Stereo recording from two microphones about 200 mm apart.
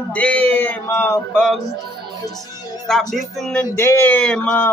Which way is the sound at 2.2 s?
20° left (ahead or behind).